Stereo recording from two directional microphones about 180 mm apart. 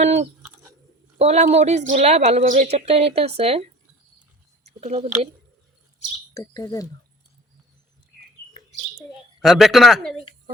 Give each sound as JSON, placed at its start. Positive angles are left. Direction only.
{"t": 0.0, "sound": "a sound", "side_deg": -40}
{"t": 1.2, "sound": "speech", "side_deg": -40}
{"t": 4.8, "sound": "speech", "side_deg": -35}
{"t": 6.3, "sound": "speech", "side_deg": 20}
{"t": 9.4, "sound": "speech", "side_deg": 0}